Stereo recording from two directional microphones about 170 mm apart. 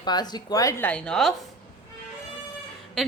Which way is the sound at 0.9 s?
5° left (ahead or behind).